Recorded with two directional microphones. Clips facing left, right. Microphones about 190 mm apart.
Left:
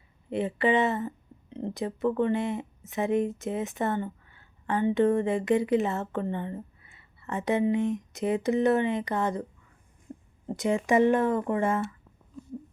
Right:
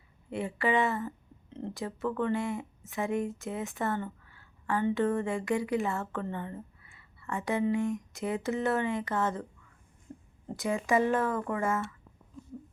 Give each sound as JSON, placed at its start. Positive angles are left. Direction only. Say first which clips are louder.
{"t": 0.3, "sound": "speech", "louder": "left 5 dB", "side_deg": 20}
{"t": 10.6, "sound": "speech", "louder": "left 5 dB", "side_deg": 20}